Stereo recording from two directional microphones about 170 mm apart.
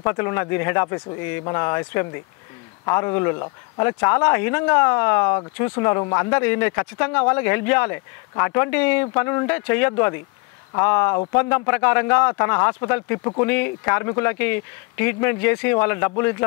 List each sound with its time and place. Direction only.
0.0 s speech: 15° left (ahead or behind)